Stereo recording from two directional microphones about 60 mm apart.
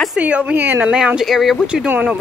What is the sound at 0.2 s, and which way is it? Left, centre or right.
Speech, right.